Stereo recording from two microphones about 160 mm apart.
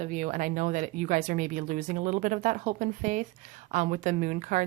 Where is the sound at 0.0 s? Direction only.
50° right (ahead or behind).